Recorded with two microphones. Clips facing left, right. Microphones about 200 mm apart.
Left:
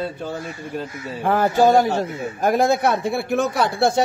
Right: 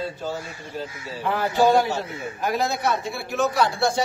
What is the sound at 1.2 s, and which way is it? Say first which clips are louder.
A man's voice: left 4 dB; 50° left (ahead or behind).